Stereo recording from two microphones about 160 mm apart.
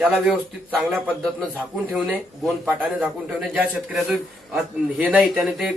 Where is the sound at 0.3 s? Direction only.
10° right (ahead or behind).